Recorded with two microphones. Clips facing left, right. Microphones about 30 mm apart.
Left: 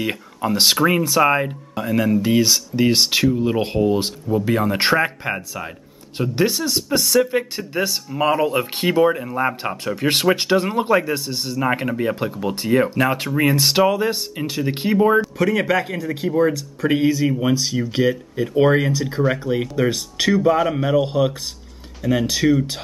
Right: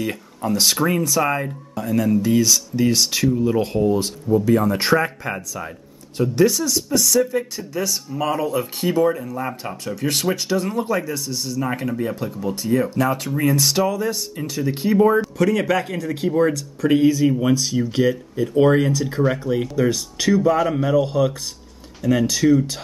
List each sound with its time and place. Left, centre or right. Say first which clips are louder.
0.0 s speech: left 2 dB; left
6.3 s speech: right 2 dB; left
10.3 s speech: left 4 dB; left
15.0 s speech: even; centre
16.5 s speech: right 2 dB; centre